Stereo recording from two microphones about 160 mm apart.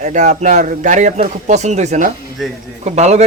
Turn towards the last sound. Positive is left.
turn(degrees=-45)  # may be behind; listen again after turning